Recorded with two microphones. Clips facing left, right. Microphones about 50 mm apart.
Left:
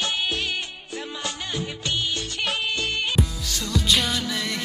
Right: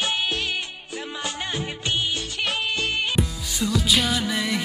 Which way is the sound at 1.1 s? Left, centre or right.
Right.